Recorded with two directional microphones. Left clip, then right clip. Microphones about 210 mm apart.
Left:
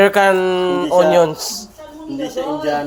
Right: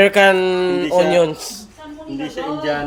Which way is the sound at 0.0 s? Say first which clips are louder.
Even; 15° right (ahead or behind).